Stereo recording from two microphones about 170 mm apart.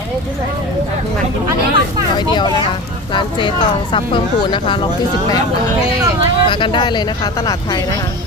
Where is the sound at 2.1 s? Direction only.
25° left (ahead or behind).